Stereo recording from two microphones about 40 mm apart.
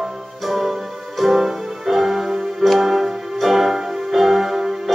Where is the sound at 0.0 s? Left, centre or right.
Centre.